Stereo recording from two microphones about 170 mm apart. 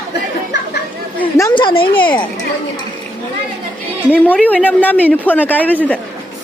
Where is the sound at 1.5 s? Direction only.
30° left (ahead or behind).